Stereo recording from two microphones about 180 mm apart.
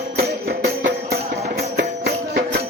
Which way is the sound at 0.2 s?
60° right (ahead or behind).